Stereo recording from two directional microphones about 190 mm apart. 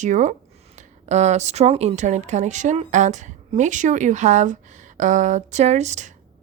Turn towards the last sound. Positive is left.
turn(degrees=-35)  # may be behind; listen again after turning